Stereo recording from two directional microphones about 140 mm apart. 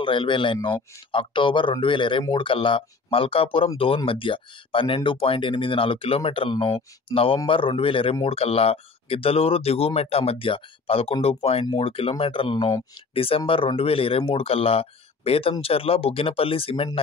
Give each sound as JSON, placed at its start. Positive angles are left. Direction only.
{"t": 0.0, "sound": "speech", "side_deg": 35}